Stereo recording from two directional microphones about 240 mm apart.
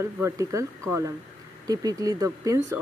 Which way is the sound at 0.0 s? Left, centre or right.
Centre.